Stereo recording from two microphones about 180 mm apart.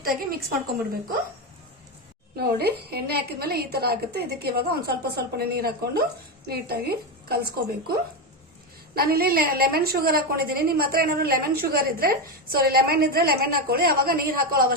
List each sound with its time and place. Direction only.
0.0 s a woman's voice: 55° right (ahead or behind)
2.3 s a woman's voice: 60° right (ahead or behind)